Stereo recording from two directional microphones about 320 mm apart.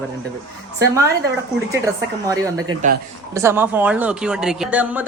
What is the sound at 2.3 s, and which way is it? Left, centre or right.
Speech, centre.